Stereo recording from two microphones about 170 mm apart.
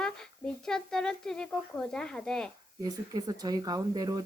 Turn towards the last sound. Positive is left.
turn(degrees=-20)  # may be behind; listen again after turning